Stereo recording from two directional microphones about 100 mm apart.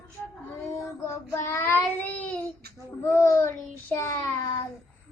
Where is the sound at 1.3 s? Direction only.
30° left (ahead or behind).